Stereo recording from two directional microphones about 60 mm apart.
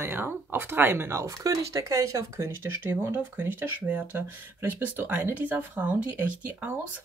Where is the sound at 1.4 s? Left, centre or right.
Right.